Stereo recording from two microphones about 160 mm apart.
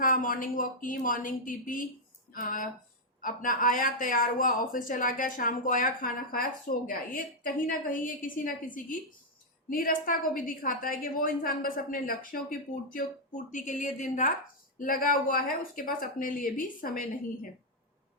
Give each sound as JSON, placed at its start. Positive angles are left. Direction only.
{"t": 0.0, "sound": "speech", "side_deg": 60}
{"t": 14.8, "sound": "speech", "side_deg": 60}